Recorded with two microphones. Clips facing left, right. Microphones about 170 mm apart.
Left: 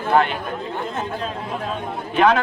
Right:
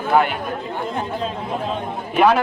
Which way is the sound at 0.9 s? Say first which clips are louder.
Right 2 dB; 15° right (ahead or behind).